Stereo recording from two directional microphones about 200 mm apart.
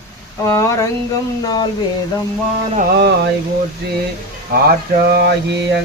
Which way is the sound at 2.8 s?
55° right (ahead or behind).